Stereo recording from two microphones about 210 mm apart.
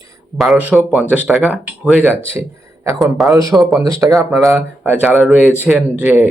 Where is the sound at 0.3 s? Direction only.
5° right (ahead or behind).